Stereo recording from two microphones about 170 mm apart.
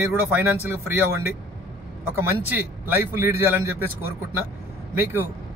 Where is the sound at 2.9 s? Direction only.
10° right (ahead or behind).